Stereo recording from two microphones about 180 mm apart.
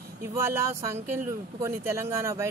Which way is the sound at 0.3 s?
15° right (ahead or behind).